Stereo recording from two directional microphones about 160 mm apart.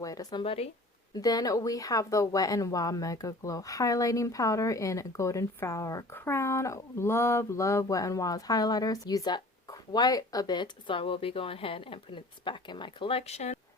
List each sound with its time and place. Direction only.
0.0 s speech: 20° left (ahead or behind); by 0.7 s 35° left (ahead or behind)
1.1 s a woman's voice: 25° left (ahead or behind); by 13.6 s 40° left (ahead or behind)